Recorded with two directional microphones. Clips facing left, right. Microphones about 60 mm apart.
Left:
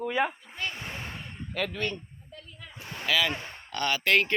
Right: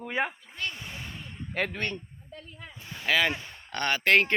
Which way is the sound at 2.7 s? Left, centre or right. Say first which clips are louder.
Left 5 dB; left.